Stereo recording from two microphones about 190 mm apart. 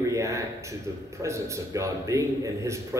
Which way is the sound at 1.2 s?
15° right (ahead or behind).